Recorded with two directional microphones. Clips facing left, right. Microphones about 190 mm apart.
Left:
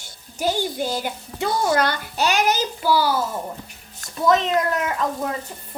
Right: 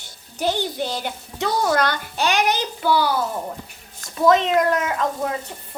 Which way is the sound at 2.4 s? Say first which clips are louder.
Even; 40° left (ahead or behind).